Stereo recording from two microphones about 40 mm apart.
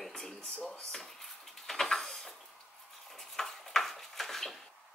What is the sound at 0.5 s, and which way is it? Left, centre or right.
Speech, left.